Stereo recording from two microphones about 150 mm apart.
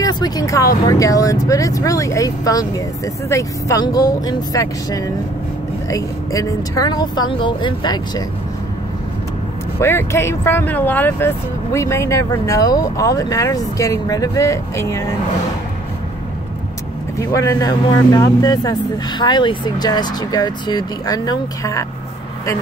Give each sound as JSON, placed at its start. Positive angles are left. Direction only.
{"t": 0.0, "sound": "speech", "side_deg": 25}
{"t": 9.8, "sound": "speech", "side_deg": 15}
{"t": 17.2, "sound": "speech", "side_deg": 20}